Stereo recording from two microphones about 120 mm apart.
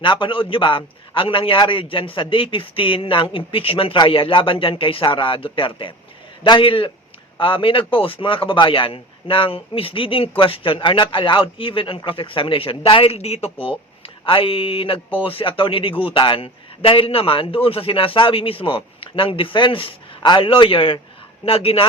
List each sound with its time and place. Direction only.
0.0 s a man's voice: 45° left (ahead or behind)